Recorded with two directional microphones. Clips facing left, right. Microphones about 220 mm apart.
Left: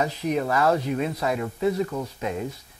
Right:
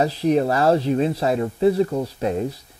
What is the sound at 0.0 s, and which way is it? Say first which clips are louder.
Speech: right 6 dB; 35° right (ahead or behind).